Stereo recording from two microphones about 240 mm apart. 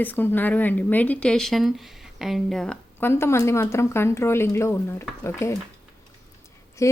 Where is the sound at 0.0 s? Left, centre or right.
Centre.